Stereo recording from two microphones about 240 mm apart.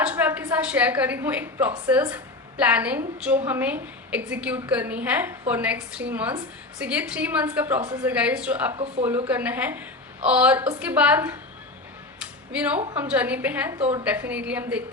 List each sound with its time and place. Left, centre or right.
0.0 s a woman's voice: centre
8.7 s speech: right
9.0 s a woman's voice: centre
12.5 s a woman's voice: centre
13.7 s speech: right
14.0 s a woman's voice: centre